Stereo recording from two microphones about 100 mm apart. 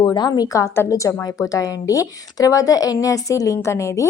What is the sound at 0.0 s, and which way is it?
A woman's voice, 40° left (ahead or behind).